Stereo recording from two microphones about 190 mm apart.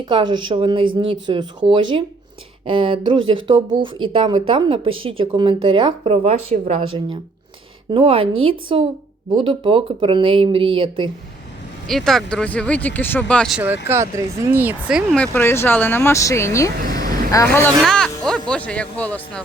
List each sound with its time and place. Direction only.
0.0 s speech: 25° right (ahead or behind)
11.9 s speech: centre (ahead or behind)
13.8 s speech: 15° right (ahead or behind)
15.2 s speech: 10° left (ahead or behind)
17.7 s speech: centre (ahead or behind)